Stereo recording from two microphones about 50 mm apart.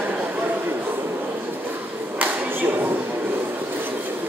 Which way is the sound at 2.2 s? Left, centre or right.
Right.